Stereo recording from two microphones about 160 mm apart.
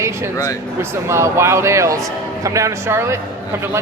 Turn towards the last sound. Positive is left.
turn(degrees=-15)  # may be behind; listen again after turning